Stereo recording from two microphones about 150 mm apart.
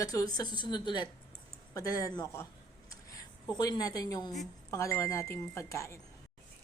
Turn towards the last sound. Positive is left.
turn(degrees=20)  # may be behind; listen again after turning